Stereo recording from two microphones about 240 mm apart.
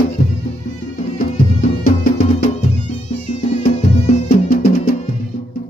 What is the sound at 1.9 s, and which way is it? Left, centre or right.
Music, left.